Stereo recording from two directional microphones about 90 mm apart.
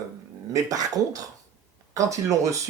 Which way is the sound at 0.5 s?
40° right (ahead or behind).